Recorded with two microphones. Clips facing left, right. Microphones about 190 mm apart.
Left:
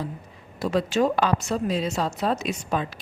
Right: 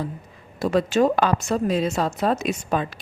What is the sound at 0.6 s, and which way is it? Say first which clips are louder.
A woman's voice: right 3 dB; 50° right (ahead or behind).